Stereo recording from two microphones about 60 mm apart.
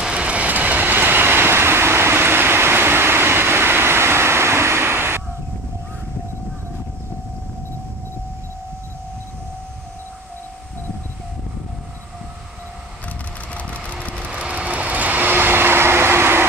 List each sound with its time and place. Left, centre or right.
0.0 s vehicle: centre; by 5.2 s right
13.6 s vehicle: left
14.1 s vehicle: centre; by 16.4 s right